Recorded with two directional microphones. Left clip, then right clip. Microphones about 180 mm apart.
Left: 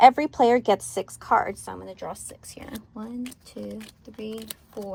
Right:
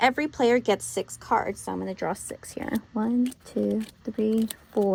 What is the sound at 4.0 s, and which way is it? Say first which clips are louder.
Speech: right 10 dB; 60° right (ahead or behind).